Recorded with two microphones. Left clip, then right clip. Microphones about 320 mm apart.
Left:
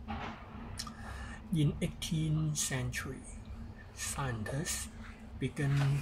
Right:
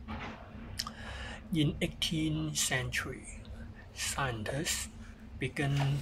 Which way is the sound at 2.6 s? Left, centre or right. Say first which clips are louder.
Right 5 dB; right.